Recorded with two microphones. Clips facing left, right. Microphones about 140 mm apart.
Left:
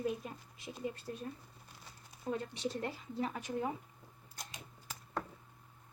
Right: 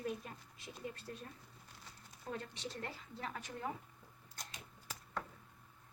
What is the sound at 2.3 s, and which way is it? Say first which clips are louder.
Speech: left 7 dB; 10° left (ahead or behind).